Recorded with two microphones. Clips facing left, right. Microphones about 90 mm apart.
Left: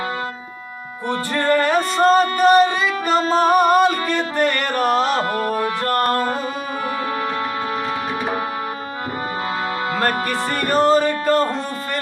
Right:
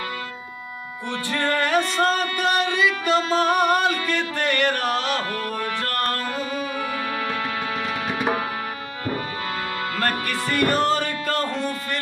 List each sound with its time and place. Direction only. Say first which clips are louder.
1.3 s music: left 4 dB; 35° left (ahead or behind)
10.6 s music: left 5 dB; 35° left (ahead or behind)